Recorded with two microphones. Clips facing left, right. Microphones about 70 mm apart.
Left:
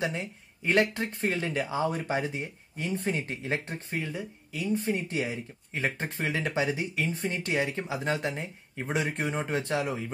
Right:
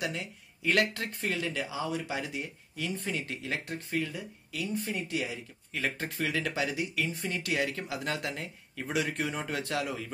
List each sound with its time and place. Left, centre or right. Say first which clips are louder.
0.0 s speech: left 3 dB; left